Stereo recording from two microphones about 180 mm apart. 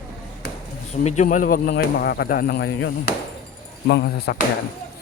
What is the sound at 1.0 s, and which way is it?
Speech, 40° left (ahead or behind).